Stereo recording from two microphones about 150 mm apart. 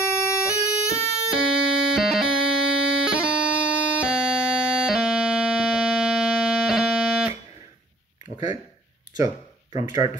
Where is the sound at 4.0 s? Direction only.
5° right (ahead or behind).